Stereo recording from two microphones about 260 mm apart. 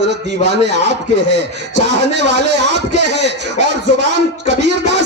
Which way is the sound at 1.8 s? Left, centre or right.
Right.